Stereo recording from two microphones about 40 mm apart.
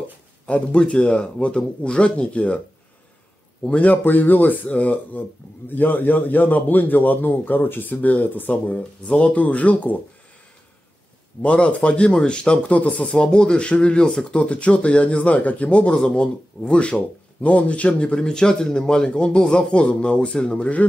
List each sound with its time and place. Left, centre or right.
0.5 s speech: left
3.6 s speech: left
3.9 s a man's voice: left
5.7 s a man's voice: left
9.0 s speech: left
9.3 s speech: left
11.4 s speech: left
13.0 s speech: centre; by 15.8 s left
15.8 s speech: left
18.2 s speech: centre